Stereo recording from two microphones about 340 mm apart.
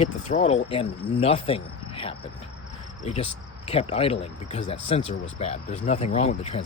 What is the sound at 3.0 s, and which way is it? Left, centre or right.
Speech, centre.